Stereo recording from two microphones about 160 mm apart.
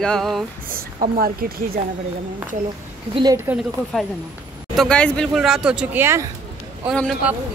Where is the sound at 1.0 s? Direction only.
65° right (ahead or behind).